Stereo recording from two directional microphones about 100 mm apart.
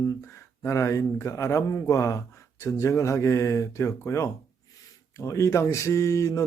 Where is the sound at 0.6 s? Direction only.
30° left (ahead or behind).